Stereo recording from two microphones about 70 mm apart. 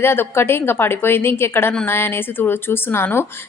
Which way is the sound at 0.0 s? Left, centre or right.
Left.